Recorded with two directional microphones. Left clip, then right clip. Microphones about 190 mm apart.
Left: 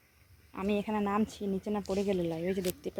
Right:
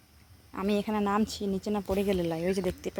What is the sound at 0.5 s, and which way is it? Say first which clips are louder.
Speech: right 3 dB; 10° right (ahead or behind).